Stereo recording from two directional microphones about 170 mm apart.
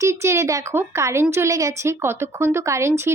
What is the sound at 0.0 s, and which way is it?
Speech, 15° right (ahead or behind).